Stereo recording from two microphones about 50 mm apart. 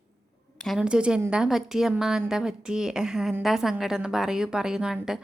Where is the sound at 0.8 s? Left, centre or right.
Centre.